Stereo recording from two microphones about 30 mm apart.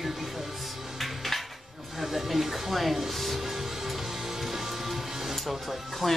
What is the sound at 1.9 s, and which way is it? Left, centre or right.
Speech, centre.